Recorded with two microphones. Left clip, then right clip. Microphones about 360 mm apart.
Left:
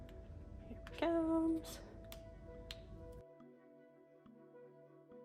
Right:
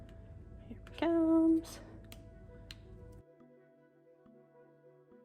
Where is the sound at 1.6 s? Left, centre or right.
Centre.